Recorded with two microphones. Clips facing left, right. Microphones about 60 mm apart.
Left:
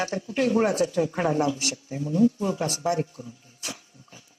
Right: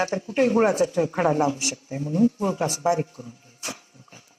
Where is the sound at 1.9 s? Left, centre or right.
Right.